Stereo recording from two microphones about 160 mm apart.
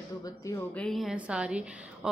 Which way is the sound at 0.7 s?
Centre (ahead or behind).